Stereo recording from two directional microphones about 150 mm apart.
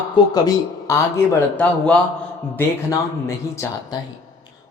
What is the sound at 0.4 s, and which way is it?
Speech, 20° left (ahead or behind).